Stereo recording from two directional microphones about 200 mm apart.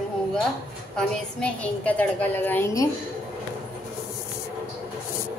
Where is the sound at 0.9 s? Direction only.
5° left (ahead or behind).